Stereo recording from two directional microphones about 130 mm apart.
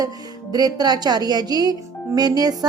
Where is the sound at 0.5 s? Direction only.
30° right (ahead or behind).